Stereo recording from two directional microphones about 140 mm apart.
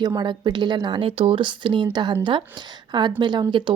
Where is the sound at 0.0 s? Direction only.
30° right (ahead or behind).